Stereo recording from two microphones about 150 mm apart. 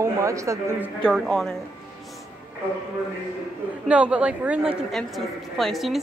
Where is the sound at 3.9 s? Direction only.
10° right (ahead or behind).